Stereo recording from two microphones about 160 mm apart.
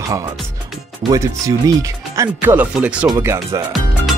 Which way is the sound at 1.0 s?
20° right (ahead or behind).